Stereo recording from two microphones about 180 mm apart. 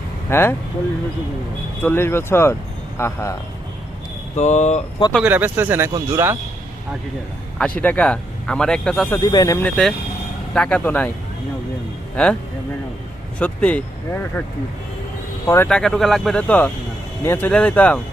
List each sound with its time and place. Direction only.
0.3 s speech: 10° left (ahead or behind)
1.8 s speech: 10° left (ahead or behind)
4.4 s speech: 40° left (ahead or behind)
5.2 s speech: 10° right (ahead or behind)
7.8 s speech: 10° left (ahead or behind)
9.1 s speech: 20° left (ahead or behind)
9.6 s speech: 5° left (ahead or behind)
12.1 s speech: 5° left (ahead or behind)
13.4 s speech: 5° left (ahead or behind)
15.4 s speech: 10° left (ahead or behind)